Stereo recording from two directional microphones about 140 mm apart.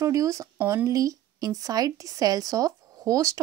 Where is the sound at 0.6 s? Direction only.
10° right (ahead or behind).